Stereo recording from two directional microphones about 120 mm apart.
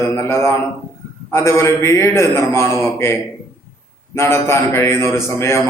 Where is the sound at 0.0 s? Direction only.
20° left (ahead or behind).